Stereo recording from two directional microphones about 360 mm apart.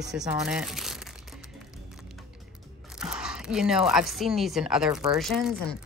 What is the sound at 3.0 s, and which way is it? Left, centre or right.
A woman's voice, centre.